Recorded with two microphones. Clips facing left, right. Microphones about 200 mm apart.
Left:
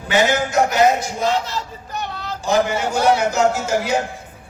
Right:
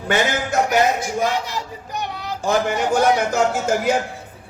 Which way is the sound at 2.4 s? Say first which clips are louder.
Left 1 dB; 50° right (ahead or behind).